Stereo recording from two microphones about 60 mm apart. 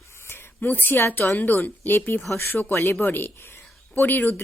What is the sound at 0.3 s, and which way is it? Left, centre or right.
A woman's voice, left.